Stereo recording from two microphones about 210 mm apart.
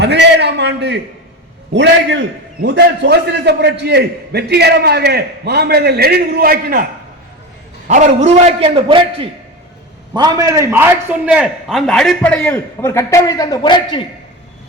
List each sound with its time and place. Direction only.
0.0 s a man's voice: 55° right (ahead or behind)
7.9 s a man's voice: 35° right (ahead or behind); by 14.0 s 20° left (ahead or behind)